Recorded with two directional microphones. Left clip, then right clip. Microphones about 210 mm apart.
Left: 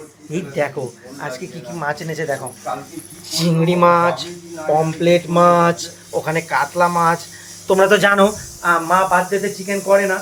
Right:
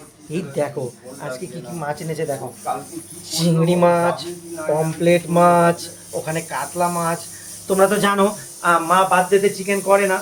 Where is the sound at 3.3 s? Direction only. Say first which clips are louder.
Left 1 dB; 5° left (ahead or behind).